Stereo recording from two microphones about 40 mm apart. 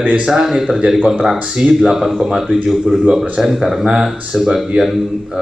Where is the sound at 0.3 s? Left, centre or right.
Centre.